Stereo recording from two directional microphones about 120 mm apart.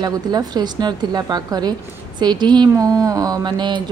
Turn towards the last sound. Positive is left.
turn(degrees=-40)  # may be behind; listen again after turning